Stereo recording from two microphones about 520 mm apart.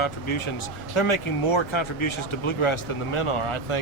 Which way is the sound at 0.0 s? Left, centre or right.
Left.